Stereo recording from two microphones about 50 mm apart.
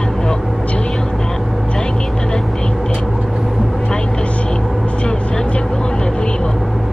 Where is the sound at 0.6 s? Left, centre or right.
Left.